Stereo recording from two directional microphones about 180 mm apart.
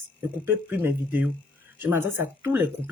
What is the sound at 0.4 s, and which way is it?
Speech, 10° right (ahead or behind).